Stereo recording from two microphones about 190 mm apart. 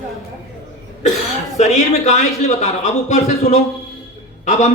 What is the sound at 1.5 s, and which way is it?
Speech, 35° left (ahead or behind).